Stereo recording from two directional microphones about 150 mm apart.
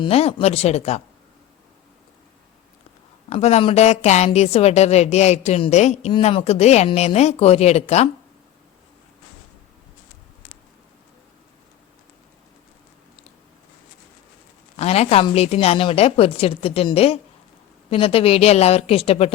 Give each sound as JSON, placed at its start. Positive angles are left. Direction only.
{"t": 0.0, "sound": "speech", "side_deg": 40}
{"t": 3.2, "sound": "speech", "side_deg": 45}
{"t": 14.8, "sound": "a woman's voice", "side_deg": 45}